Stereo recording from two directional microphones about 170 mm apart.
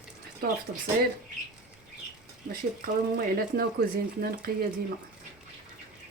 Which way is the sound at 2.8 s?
60° right (ahead or behind).